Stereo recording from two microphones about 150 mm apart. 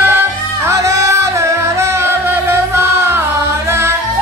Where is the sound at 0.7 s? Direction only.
20° right (ahead or behind).